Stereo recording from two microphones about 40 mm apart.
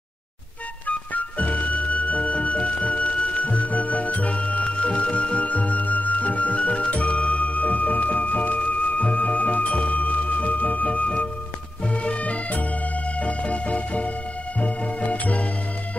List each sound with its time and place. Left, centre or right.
0.8 s music: left